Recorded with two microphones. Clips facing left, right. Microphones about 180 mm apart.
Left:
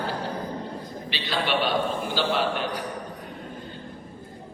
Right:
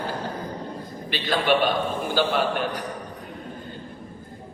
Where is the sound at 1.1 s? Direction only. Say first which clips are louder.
Right 5 dB; 50° right (ahead or behind).